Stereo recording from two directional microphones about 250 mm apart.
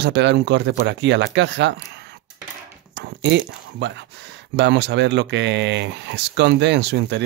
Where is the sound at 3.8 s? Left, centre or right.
Right.